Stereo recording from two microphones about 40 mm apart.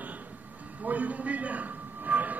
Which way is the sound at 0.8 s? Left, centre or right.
Right.